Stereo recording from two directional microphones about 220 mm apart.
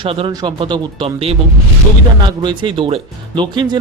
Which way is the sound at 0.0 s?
25° right (ahead or behind).